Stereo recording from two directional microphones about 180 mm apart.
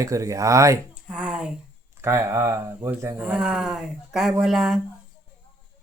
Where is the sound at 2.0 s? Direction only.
15° right (ahead or behind).